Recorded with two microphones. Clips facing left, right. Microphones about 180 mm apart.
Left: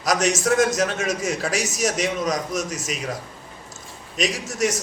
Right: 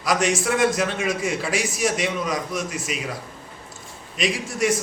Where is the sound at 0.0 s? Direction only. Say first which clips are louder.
Even; 40° left (ahead or behind).